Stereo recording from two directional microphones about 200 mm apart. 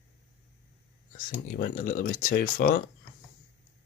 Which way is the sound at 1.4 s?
45° left (ahead or behind).